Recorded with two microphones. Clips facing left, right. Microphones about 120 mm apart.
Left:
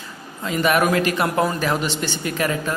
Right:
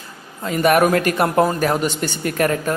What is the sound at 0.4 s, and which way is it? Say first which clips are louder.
Speech: right 4 dB; 45° right (ahead or behind).